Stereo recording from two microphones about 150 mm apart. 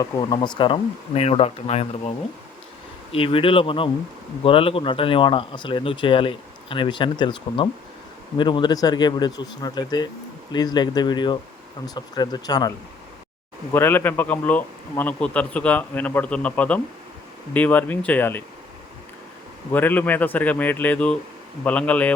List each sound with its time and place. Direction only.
0.0 s speech: 30° left (ahead or behind)
13.7 s a man's voice: 15° left (ahead or behind)
19.7 s a man's voice: 10° left (ahead or behind)